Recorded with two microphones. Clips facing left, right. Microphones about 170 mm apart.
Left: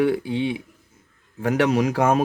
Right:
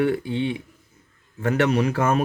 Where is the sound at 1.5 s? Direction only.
90° left.